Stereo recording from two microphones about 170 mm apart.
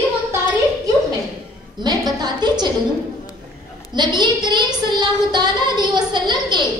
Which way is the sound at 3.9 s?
25° right (ahead or behind).